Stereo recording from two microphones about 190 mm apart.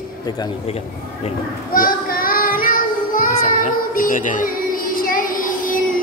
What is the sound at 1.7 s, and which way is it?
Child singing, 50° left (ahead or behind).